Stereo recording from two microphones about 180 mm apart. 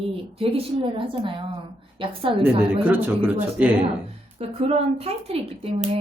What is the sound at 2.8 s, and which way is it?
Speech, 10° right (ahead or behind).